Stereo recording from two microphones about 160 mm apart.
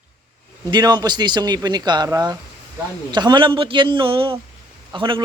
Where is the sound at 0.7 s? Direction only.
25° right (ahead or behind).